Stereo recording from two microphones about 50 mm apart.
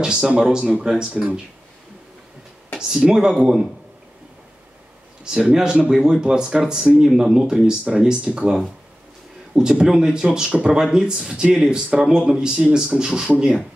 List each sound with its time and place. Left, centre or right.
0.0 s speech: centre
2.9 s speech: centre
5.2 s speech: centre
9.6 s speech: centre